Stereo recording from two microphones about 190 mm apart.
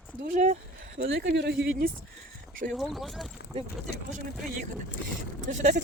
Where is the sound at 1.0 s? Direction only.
70° right (ahead or behind).